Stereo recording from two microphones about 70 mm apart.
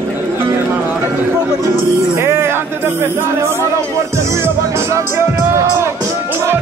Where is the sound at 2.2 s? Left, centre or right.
Right.